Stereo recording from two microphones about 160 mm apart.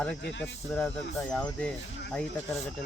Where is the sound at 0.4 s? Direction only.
10° left (ahead or behind).